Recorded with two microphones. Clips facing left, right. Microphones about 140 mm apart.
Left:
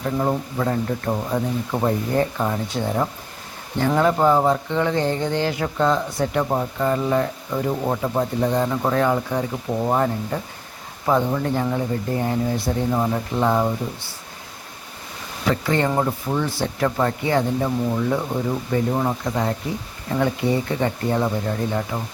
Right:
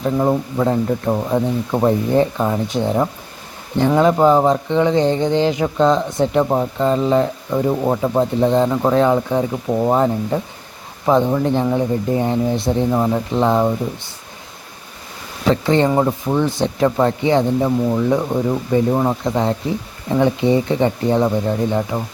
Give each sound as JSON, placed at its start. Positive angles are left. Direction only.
{"t": 0.0, "sound": "speech", "side_deg": -20}
{"t": 15.4, "sound": "speech", "side_deg": -25}